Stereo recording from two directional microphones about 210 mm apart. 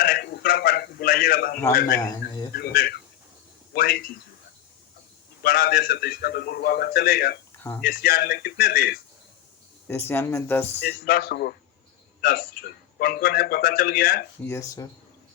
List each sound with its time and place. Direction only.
0.0 s a man's voice: 45° left (ahead or behind)
2.0 s a man's voice: 20° left (ahead or behind)
2.6 s a man's voice: 45° left (ahead or behind)
5.4 s a man's voice: 45° left (ahead or behind)
9.8 s speech: 10° left (ahead or behind)
10.8 s a man's voice: 50° left (ahead or behind)
14.4 s speech: 15° left (ahead or behind)